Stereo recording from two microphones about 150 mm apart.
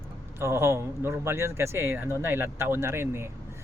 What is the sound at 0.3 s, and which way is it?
Speech, 15° right (ahead or behind).